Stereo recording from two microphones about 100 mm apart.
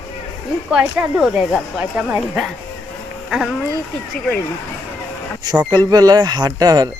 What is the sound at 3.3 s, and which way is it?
Speech, 5° right (ahead or behind).